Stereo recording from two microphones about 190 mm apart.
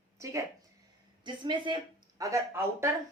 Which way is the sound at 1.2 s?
25° right (ahead or behind).